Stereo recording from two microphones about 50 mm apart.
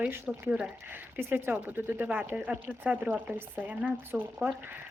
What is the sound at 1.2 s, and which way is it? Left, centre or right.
Speech, right.